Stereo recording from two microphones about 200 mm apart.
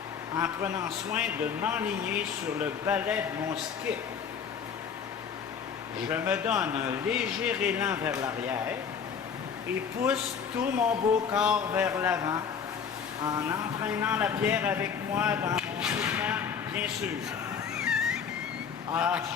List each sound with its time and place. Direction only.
0.3 s a man's voice: 15° right (ahead or behind)
6.1 s a man's voice: 10° right (ahead or behind)
10.8 s a man's voice: 10° right (ahead or behind)
17.7 s music: 5° right (ahead or behind)
18.9 s a man's voice: 5° right (ahead or behind)